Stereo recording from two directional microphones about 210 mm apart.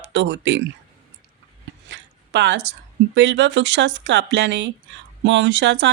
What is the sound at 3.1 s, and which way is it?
Speech, 55° right (ahead or behind).